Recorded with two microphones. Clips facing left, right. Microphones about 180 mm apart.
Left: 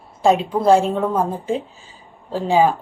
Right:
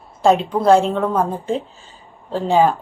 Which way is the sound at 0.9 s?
15° left (ahead or behind).